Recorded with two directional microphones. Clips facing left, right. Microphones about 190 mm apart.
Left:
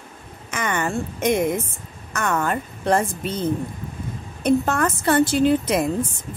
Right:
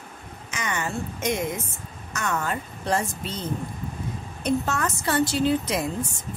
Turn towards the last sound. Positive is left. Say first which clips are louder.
# left 5 dB
turn(degrees=55)  # may be behind; listen again after turning